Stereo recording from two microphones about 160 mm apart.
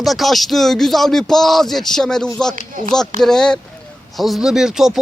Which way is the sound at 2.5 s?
55° right (ahead or behind).